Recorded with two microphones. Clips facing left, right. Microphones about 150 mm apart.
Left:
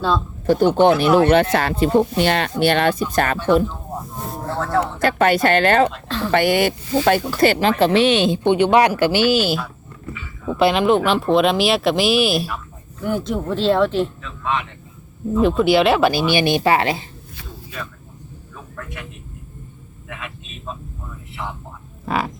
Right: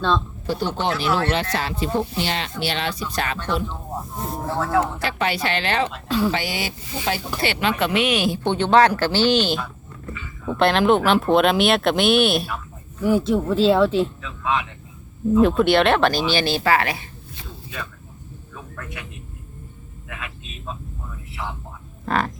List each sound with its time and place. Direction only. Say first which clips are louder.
0.4 s speech: left 13 dB; 55° left (ahead or behind)
4.4 s a sound: even; 10° right (ahead or behind)
5.0 s speech: left 8 dB; 50° left (ahead or behind)
5.9 s speech: right 4 dB; 10° right (ahead or behind)
6.3 s speech: left 10 dB; 55° left (ahead or behind)
7.3 s speech: left 8 dB; 45° left (ahead or behind)
7.8 s a woman's voice: left 6 dB; 30° left (ahead or behind)
18.5 s a sound: left 1 dB; centre (ahead or behind)
20.1 s vehicle: left 2 dB; centre (ahead or behind)
22.0 s frog: even; 5° left (ahead or behind)